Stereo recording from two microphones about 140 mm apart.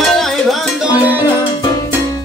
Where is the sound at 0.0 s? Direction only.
Centre (ahead or behind).